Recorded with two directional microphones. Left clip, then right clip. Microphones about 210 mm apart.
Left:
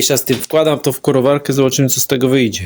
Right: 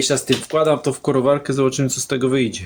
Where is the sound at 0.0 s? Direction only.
40° left (ahead or behind).